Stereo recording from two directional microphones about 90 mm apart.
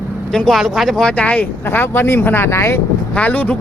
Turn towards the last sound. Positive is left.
turn(degrees=15)  # may be behind; listen again after turning